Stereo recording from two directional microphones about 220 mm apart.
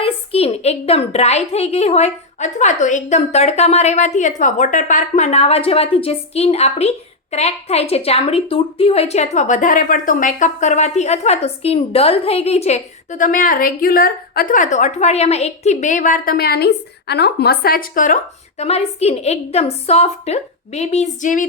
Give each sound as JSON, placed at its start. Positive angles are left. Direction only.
{"t": 0.0, "sound": "a woman's voice", "side_deg": 25}